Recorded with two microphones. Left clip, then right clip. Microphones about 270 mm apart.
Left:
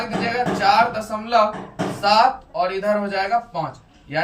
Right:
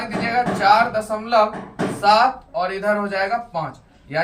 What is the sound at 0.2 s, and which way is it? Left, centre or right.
Music, centre.